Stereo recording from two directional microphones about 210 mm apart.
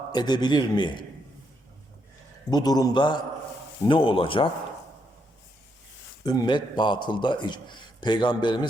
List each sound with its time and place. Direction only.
0.1 s a man's voice: 20° left (ahead or behind)
2.5 s a man's voice: 20° left (ahead or behind)
6.2 s a man's voice: 20° left (ahead or behind)